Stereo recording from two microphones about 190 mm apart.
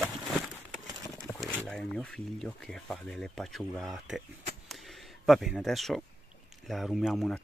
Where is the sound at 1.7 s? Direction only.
5° left (ahead or behind).